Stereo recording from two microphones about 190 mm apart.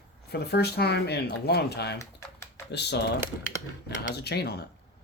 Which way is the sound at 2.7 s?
65° left (ahead or behind).